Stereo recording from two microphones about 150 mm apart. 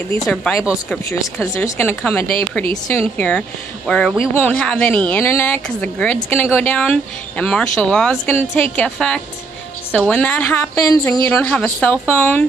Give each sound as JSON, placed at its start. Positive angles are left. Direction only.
{"t": 0.2, "sound": "a woman's voice", "side_deg": 5}
{"t": 1.2, "sound": "a woman's voice", "side_deg": 15}